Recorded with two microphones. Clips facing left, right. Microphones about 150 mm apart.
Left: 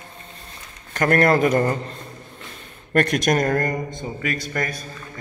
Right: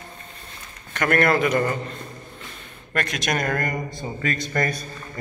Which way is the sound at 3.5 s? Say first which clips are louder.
Left 4 dB; 30° left (ahead or behind).